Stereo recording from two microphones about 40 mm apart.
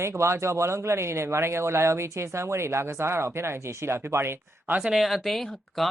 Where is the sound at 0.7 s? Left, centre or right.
Right.